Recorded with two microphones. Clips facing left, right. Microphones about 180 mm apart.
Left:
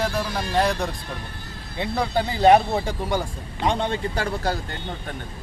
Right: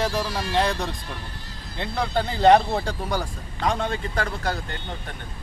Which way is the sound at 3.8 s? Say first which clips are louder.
Left 2 dB; 30° left (ahead or behind).